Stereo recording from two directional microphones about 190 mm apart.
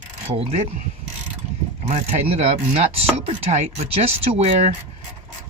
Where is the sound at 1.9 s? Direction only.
35° right (ahead or behind).